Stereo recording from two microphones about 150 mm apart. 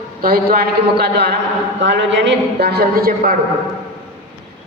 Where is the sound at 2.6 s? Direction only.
90° right.